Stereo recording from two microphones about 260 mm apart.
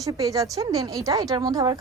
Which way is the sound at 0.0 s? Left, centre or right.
Centre.